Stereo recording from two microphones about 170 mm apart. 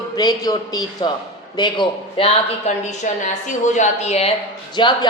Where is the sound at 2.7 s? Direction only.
40° left (ahead or behind).